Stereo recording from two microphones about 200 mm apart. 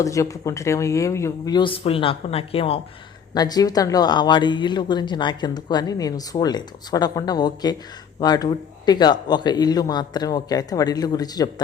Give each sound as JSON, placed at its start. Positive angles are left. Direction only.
{"t": 0.0, "sound": "speech", "side_deg": 15}